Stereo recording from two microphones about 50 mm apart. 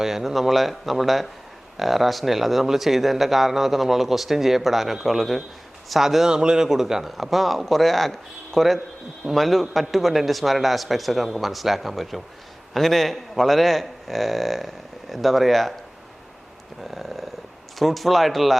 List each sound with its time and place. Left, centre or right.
0.0 s speech: centre
16.9 s a sound: centre
17.7 s speech: centre